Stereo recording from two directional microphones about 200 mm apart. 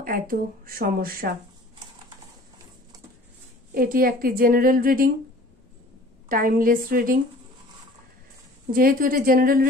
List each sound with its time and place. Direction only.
0.0 s a woman's voice: 45° right (ahead or behind)
3.7 s a woman's voice: 45° right (ahead or behind)
6.2 s a woman's voice: 45° right (ahead or behind)
8.7 s a woman's voice: 45° right (ahead or behind)